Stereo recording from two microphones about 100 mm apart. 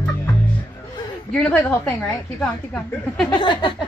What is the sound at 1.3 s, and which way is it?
Speech, 10° left (ahead or behind).